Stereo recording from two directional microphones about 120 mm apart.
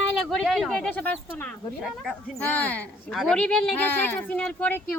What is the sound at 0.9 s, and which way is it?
Speech, 15° left (ahead or behind).